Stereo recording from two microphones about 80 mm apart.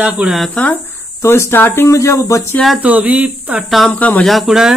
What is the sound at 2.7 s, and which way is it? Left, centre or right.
Speech, centre.